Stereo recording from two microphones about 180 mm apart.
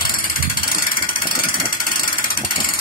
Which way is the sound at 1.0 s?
50° left (ahead or behind).